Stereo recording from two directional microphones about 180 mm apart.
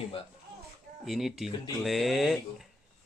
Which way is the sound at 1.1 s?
Centre (ahead or behind).